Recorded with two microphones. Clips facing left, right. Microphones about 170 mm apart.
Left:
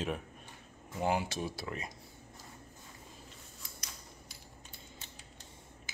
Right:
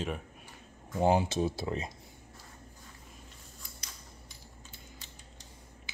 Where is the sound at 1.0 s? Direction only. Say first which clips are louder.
Right 6 dB; 25° right (ahead or behind).